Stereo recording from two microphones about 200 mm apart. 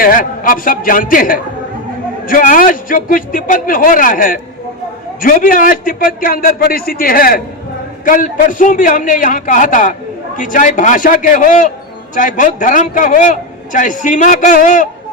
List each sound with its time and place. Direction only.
0.0 s a man's voice: 45° left (ahead or behind)